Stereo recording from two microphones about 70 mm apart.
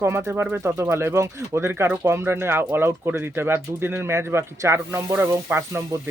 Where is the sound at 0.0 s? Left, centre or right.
Right.